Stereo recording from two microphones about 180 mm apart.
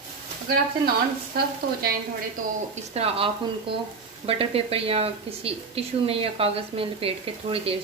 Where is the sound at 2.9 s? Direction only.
35° right (ahead or behind).